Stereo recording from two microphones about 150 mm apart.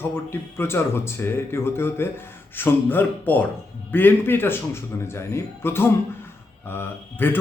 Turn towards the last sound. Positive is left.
turn(degrees=15)  # may be behind; listen again after turning